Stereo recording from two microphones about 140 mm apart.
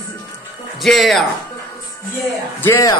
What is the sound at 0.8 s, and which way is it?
Speech, centre (ahead or behind).